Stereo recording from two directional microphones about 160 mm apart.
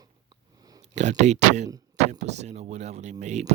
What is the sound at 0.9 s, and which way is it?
Speech, 45° right (ahead or behind).